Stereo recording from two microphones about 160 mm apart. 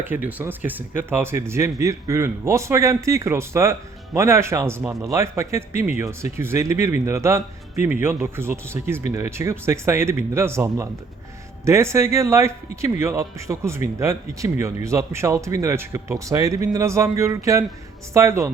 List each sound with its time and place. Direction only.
0.0 s speech: 10° right (ahead or behind)